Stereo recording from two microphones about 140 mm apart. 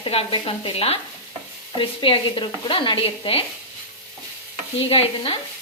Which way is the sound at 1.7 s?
40° left (ahead or behind).